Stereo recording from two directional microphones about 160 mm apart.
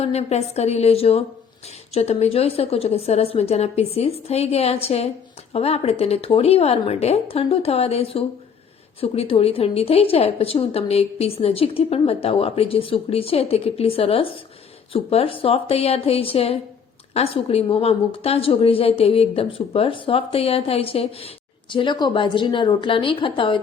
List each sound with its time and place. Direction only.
0.0 s a woman's voice: 40° left (ahead or behind)